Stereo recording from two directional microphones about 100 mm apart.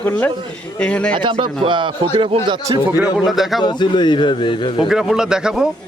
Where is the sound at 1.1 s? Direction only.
55° right (ahead or behind).